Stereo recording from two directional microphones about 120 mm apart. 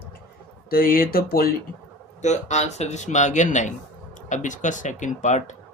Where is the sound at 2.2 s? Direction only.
70° left (ahead or behind).